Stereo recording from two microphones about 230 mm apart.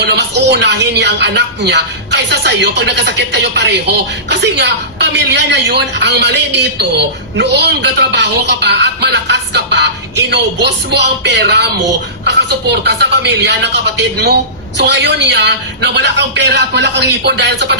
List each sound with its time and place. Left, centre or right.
0.0 s a woman's voice: right